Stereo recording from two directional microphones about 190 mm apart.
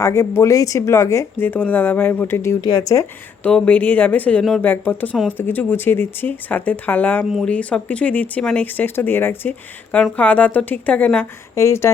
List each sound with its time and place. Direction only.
0.0 s speech: 15° left (ahead or behind)